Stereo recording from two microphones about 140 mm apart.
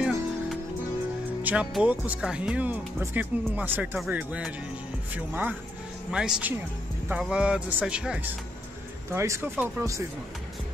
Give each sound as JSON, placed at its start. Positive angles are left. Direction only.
{"t": 0.0, "sound": "music", "side_deg": 0}
{"t": 1.4, "sound": "speech", "side_deg": -10}